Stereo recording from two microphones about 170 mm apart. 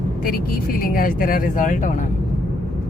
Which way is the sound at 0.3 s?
60° left (ahead or behind).